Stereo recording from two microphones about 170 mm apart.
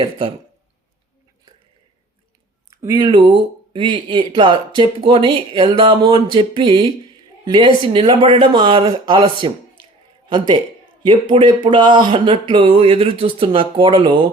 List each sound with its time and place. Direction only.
2.6 s speech: 20° right (ahead or behind)